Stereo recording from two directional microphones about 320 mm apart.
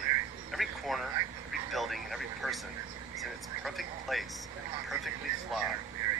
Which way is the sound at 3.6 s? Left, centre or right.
Centre.